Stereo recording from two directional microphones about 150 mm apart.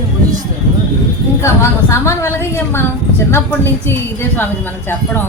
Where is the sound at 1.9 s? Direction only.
20° left (ahead or behind).